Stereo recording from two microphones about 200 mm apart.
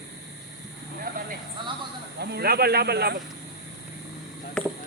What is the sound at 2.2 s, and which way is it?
Speech, 55° right (ahead or behind).